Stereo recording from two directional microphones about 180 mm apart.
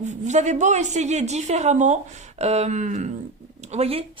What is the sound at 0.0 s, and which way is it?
Speech, 40° right (ahead or behind).